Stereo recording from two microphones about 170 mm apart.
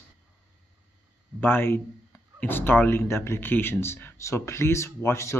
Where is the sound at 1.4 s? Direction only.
15° left (ahead or behind).